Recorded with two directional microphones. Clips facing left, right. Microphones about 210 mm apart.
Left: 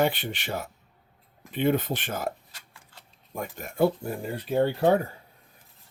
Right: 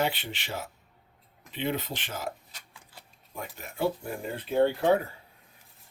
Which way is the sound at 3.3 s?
45° left (ahead or behind).